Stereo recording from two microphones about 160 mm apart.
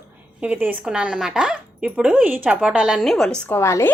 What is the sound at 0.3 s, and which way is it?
Speech, 10° right (ahead or behind).